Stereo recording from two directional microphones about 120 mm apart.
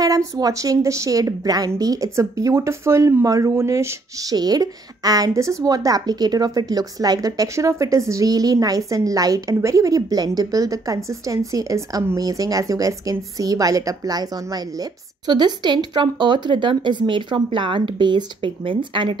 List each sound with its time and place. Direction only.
0.0 s speech: 30° right (ahead or behind); by 19.1 s 45° right (ahead or behind)